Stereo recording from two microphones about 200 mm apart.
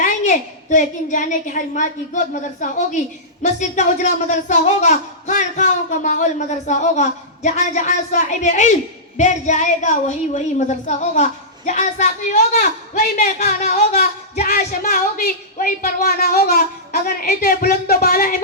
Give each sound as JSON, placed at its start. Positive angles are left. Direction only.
{"t": 0.0, "sound": "a woman's voice", "side_deg": 40}